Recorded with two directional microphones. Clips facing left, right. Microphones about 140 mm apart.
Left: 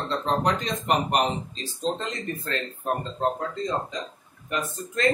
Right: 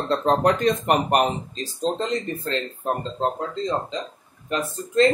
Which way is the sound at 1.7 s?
35° right (ahead or behind).